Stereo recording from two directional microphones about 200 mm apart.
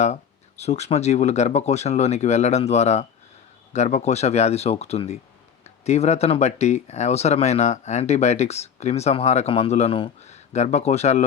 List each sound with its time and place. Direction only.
0.6 s speech: 35° left (ahead or behind)